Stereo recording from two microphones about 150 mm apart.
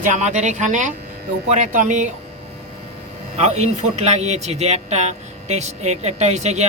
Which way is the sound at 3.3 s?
50° right (ahead or behind).